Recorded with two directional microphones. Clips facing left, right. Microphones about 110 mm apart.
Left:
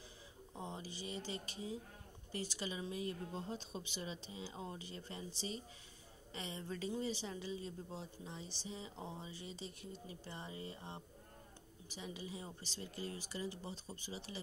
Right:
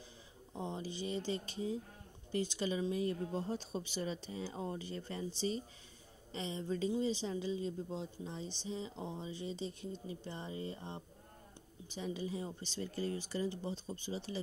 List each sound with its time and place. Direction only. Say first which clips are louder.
0.6 s speech: right 6 dB; 30° right (ahead or behind)
2.3 s speech: right 8 dB; 40° left (ahead or behind)
2.6 s speech: right 7 dB; 35° right (ahead or behind)
6.3 s speech: right 7 dB; 25° right (ahead or behind)
12.0 s speech: right 8 dB; 35° right (ahead or behind)